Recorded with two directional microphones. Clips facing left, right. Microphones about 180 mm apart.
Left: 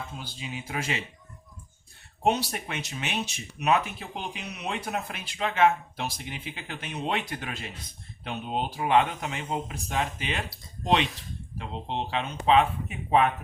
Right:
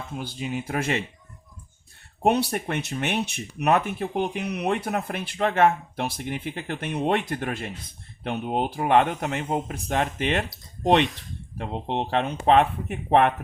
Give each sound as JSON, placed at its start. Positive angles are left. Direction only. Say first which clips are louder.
{"t": 0.2, "sound": "speech", "louder": "right 8 dB", "side_deg": -55}
{"t": 2.2, "sound": "speech", "louder": "right 4 dB", "side_deg": -60}
{"t": 11.5, "sound": "speech", "louder": "right 5 dB", "side_deg": -55}